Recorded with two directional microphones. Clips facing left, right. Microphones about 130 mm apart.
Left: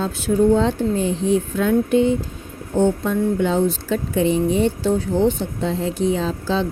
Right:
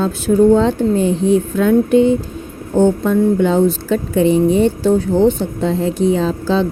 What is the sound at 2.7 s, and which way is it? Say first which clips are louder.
Speech: right 5 dB; 65° right (ahead or behind).